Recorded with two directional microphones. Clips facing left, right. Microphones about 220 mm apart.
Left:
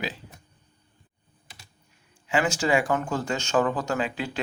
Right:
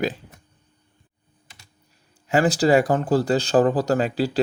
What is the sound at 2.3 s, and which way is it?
Speech, 40° right (ahead or behind).